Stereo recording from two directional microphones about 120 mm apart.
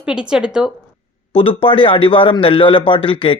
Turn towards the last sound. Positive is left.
turn(degrees=45)  # may be behind; listen again after turning